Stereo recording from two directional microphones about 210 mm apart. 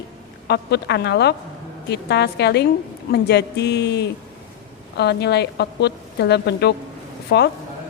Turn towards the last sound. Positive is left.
turn(degrees=50)  # may be behind; listen again after turning